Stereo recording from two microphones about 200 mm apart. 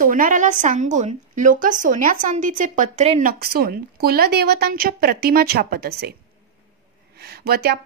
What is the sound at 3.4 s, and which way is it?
Speech, 50° right (ahead or behind).